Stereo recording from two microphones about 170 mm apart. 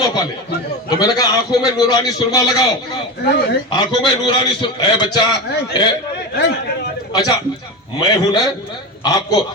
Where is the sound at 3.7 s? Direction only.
25° left (ahead or behind).